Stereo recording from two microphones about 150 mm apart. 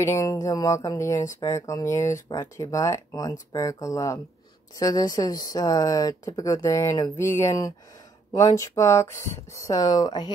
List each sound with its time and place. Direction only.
0.0 s speech: 20° left (ahead or behind)